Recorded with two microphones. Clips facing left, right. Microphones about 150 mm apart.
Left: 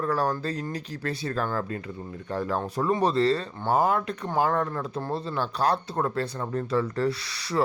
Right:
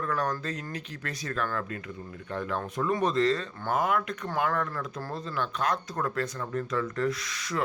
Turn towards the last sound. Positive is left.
turn(degrees=35)  # may be behind; listen again after turning